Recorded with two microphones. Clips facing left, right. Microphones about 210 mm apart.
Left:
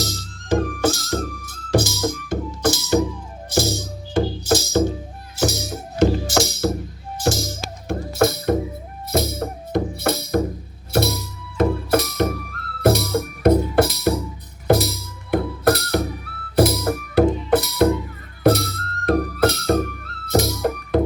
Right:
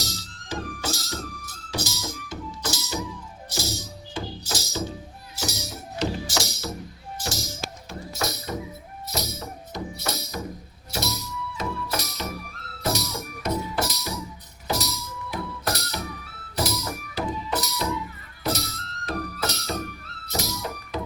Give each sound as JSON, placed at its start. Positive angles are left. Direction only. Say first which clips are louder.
{"t": 0.0, "sound": "music", "louder": "left 8 dB", "side_deg": 50}